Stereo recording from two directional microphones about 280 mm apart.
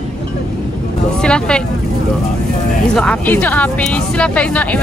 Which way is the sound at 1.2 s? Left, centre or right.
Centre.